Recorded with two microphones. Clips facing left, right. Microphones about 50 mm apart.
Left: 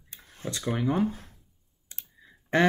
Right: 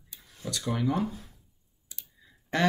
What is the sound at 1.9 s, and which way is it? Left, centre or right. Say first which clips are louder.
Clicking: left 2 dB; left.